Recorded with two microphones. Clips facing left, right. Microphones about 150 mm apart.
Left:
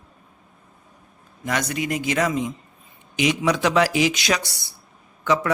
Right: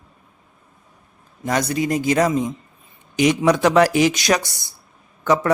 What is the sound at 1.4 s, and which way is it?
A man's voice, 35° right (ahead or behind).